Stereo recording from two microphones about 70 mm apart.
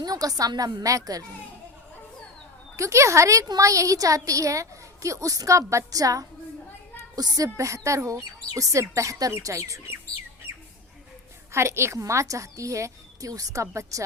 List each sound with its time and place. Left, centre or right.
0.0 s a woman's voice: right
2.7 s a woman's voice: right
11.5 s a woman's voice: right